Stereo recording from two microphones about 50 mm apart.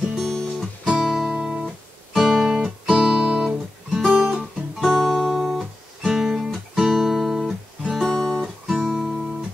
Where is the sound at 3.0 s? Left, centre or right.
Centre.